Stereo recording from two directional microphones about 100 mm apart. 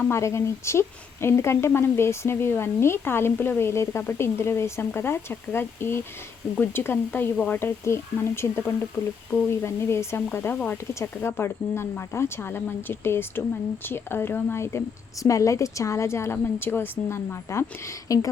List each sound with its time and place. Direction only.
0.1 s a woman's voice: 30° left (ahead or behind)
7.6 s a woman's voice: 25° left (ahead or behind)